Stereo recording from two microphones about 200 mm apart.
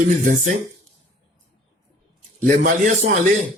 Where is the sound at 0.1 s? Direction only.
40° right (ahead or behind).